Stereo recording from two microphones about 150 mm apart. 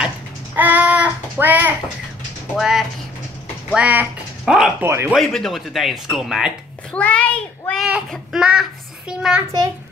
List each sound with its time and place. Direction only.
0.6 s child singing: 10° right (ahead or behind)
2.5 s speech: 5° right (ahead or behind)
4.8 s speech: 15° right (ahead or behind)
5.1 s speech: centre (ahead or behind)
6.9 s a child's voice: 10° left (ahead or behind)
8.1 s speech: 5° right (ahead or behind)